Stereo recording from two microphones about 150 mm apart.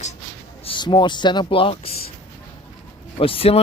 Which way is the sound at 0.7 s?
30° left (ahead or behind).